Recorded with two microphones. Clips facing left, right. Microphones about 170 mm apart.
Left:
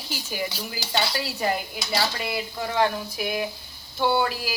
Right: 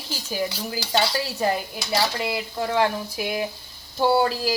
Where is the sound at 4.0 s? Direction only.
35° right (ahead or behind).